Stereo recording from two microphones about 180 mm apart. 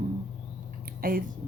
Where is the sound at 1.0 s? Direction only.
50° right (ahead or behind).